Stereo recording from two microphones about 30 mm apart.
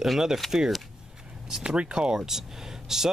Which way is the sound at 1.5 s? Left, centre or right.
Right.